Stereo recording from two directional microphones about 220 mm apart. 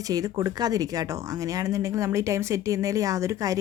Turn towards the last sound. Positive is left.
turn(degrees=-15)  # may be behind; listen again after turning